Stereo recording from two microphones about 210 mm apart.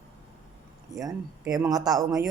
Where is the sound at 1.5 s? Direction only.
15° right (ahead or behind).